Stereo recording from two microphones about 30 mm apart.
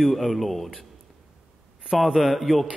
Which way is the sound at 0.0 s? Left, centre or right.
Centre.